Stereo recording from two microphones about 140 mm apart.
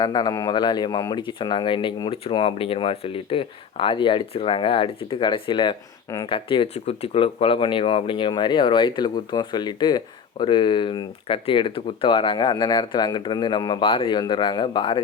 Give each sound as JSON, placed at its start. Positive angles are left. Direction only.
{"t": 0.0, "sound": "speech", "side_deg": 30}